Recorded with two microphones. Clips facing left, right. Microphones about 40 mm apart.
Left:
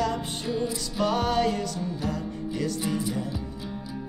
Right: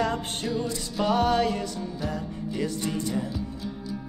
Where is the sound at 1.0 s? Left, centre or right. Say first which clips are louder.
Right 2 dB; centre.